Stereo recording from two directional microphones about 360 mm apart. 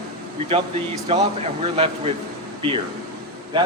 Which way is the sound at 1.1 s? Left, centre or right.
Centre.